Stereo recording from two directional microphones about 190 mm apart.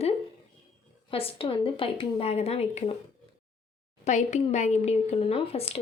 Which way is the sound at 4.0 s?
40° left (ahead or behind).